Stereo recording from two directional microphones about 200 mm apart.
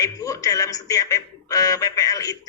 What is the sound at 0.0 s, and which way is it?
Speech, 15° left (ahead or behind).